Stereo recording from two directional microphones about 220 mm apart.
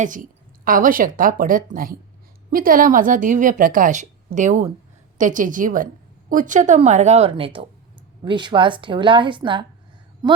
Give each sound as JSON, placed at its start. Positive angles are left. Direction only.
{"t": 0.0, "sound": "a woman's voice", "side_deg": -35}